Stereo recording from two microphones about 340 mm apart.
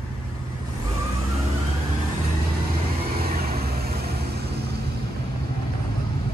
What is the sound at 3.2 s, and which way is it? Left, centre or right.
Vehicle, right.